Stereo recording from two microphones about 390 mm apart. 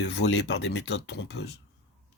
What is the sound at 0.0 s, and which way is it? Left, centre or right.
Speech, left.